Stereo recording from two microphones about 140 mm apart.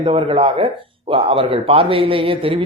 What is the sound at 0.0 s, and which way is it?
Speech, 40° right (ahead or behind).